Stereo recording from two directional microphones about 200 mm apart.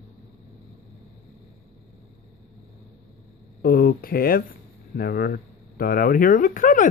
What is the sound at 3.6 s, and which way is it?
Speech, 45° left (ahead or behind).